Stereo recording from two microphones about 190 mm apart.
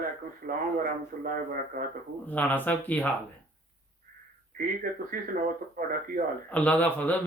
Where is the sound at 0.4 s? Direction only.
45° right (ahead or behind).